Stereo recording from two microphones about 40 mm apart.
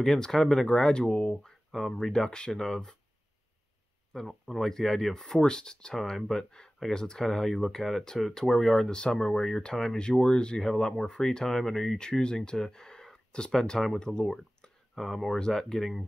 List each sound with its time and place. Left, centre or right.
0.0 s speech: centre
1.7 s speech: centre
4.1 s speech: centre
5.9 s speech: centre
15.0 s speech: centre
15.2 s speech: centre